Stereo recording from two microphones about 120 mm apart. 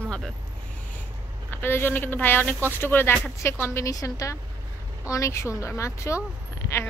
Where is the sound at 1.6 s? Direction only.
20° left (ahead or behind).